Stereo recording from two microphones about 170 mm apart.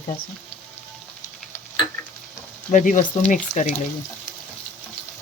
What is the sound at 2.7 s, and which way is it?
Speech, 50° left (ahead or behind).